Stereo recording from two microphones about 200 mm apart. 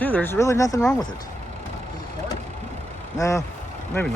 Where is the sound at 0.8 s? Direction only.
5° left (ahead or behind).